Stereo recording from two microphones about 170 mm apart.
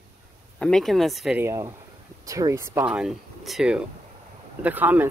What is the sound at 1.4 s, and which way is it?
Speech, 15° right (ahead or behind).